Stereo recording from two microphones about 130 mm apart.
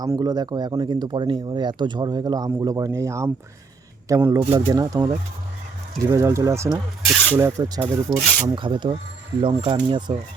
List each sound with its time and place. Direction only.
0.0 s speech: 30° right (ahead or behind)
8.5 s speech: 40° right (ahead or behind)